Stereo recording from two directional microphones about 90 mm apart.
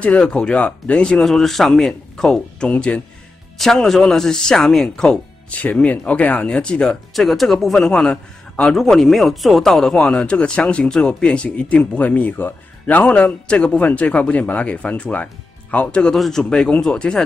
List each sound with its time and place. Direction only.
0.0 s speech: 15° left (ahead or behind)